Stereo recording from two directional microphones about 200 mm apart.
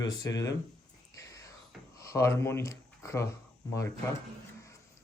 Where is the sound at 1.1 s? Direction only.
15° left (ahead or behind).